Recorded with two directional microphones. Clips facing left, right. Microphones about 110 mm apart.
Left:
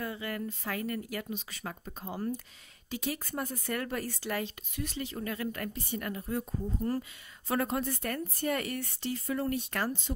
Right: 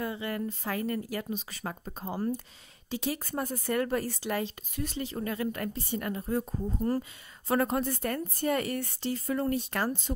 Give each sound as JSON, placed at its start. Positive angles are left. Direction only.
{"t": 0.0, "sound": "a woman's voice", "side_deg": -25}
{"t": 4.7, "sound": "a woman's voice", "side_deg": -35}